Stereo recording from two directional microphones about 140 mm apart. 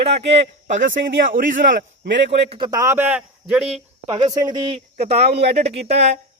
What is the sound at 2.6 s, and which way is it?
Speech, 25° right (ahead or behind).